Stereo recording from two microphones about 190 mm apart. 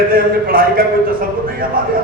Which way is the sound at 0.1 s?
50° right (ahead or behind).